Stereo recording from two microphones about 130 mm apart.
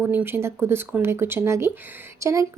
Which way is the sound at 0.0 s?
15° right (ahead or behind).